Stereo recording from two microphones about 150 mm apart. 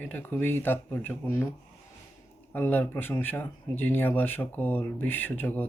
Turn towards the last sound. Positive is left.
turn(degrees=15)  # may be behind; listen again after turning